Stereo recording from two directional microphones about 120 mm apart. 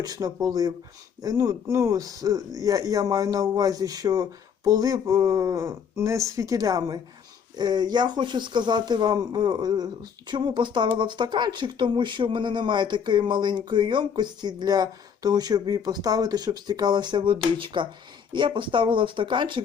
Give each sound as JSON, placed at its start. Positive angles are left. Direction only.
{"t": 0.0, "sound": "speech", "side_deg": -35}